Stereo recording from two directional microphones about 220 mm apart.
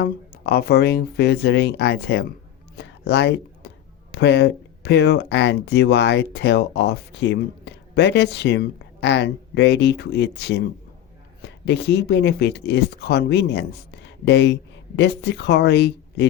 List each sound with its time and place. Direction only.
0.0 s speech: 45° left (ahead or behind)
2.7 s a sound: 50° left (ahead or behind)
4.1 s speech: 50° left (ahead or behind)